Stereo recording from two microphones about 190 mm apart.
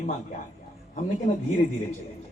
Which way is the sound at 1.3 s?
35° left (ahead or behind).